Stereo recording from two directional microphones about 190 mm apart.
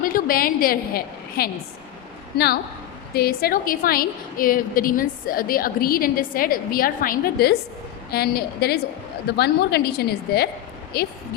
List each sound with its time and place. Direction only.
0.0 s a woman's voice: 50° left (ahead or behind)